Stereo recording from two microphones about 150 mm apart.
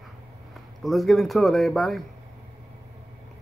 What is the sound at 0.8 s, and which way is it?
Speech, centre (ahead or behind).